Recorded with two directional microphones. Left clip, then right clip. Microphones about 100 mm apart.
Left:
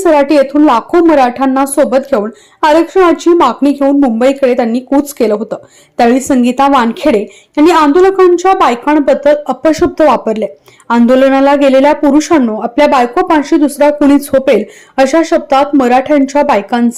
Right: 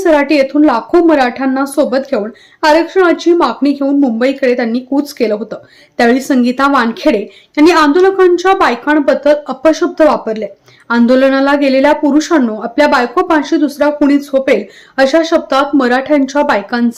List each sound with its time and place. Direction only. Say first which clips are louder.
0.0 s a woman's voice: left 2 dB; 25° left (ahead or behind)
9.6 s a woman's voice: left 1 dB; 40° left (ahead or behind)
10.9 s a woman's voice: left 2 dB; 25° left (ahead or behind); by 14.6 s 65° left (ahead or behind)
14.9 s a woman's voice: left 1 dB; 40° left (ahead or behind)
15.3 s a woman's voice: left 2 dB; 25° left (ahead or behind)